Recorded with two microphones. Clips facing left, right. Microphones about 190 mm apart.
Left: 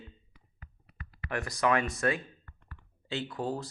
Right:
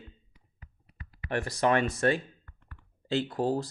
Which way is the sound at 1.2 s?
30° right (ahead or behind).